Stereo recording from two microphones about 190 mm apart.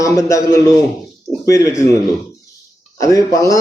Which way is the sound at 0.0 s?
15° left (ahead or behind).